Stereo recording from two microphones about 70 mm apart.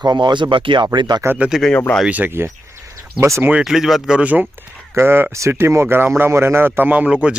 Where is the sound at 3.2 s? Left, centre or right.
Right.